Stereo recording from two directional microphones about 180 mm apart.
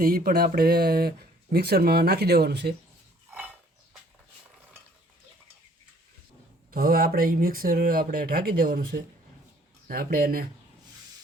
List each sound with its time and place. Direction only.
0.0 s speech: 55° right (ahead or behind)
3.3 s a sound: 10° right (ahead or behind)
6.7 s speech: 55° right (ahead or behind)